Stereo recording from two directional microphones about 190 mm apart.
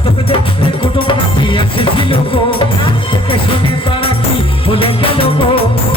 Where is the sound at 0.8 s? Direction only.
25° left (ahead or behind).